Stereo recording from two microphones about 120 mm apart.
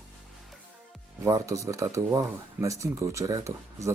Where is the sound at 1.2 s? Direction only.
25° right (ahead or behind).